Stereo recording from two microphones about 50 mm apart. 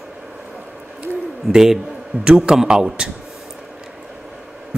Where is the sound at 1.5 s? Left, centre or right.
Centre.